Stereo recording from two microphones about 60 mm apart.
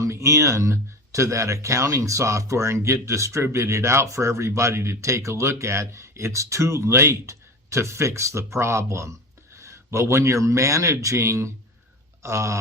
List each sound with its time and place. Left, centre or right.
0.0 s speech: right